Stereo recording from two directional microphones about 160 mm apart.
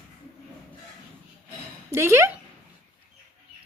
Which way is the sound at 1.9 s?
15° right (ahead or behind).